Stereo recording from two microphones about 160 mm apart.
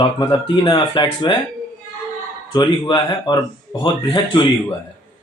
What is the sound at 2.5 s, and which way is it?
Speech, 25° left (ahead or behind).